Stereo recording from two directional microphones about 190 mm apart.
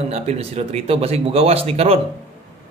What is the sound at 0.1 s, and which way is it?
A man's voice, 35° right (ahead or behind).